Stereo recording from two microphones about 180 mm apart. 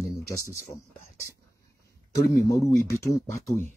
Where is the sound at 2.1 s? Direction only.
15° left (ahead or behind).